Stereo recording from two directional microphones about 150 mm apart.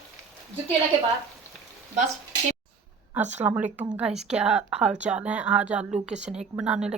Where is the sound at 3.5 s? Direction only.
10° right (ahead or behind).